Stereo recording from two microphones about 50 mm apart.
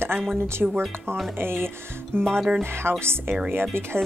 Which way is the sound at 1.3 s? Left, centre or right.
Right.